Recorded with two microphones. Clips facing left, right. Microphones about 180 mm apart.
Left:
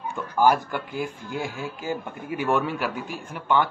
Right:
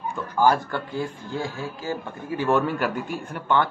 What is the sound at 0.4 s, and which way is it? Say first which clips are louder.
A man's voice: even; 15° left (ahead or behind).